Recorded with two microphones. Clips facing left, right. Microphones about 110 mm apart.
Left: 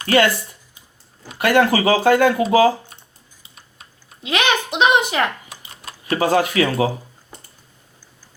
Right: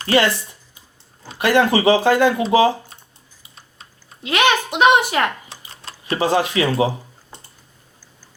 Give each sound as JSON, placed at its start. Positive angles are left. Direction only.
{"t": 0.0, "sound": "speech", "side_deg": -25}
{"t": 4.2, "sound": "a child's voice", "side_deg": 20}
{"t": 5.5, "sound": "typing", "side_deg": -30}